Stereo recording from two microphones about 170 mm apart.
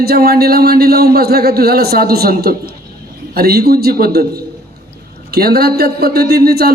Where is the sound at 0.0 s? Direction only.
65° right (ahead or behind).